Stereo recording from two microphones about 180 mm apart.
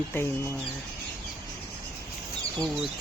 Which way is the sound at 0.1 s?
15° left (ahead or behind).